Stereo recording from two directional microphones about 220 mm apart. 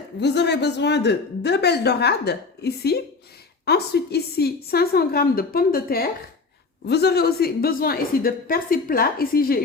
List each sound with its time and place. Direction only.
0.2 s speech: 50° left (ahead or behind)